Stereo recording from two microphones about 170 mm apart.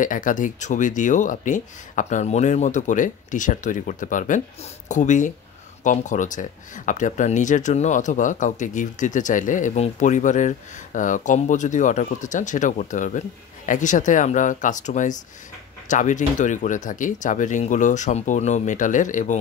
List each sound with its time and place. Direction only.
0.0 s speech: 50° left (ahead or behind)